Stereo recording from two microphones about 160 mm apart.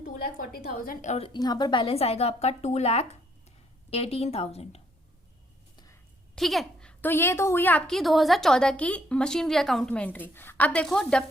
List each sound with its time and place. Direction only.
0.0 s a woman's voice: 60° left (ahead or behind)
1.3 s a woman's voice: 25° left (ahead or behind)
5.7 s a sound: 25° left (ahead or behind)
6.3 s a woman's voice: centre (ahead or behind)